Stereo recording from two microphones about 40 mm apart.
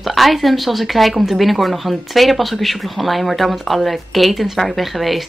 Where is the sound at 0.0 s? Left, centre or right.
Centre.